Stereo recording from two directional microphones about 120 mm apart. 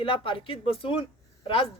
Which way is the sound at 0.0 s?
50° left (ahead or behind).